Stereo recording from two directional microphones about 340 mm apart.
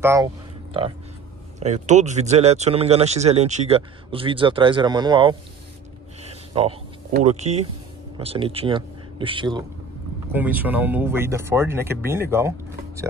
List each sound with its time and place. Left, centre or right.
0.0 s speech: centre
1.6 s speech: centre
6.5 s speech: centre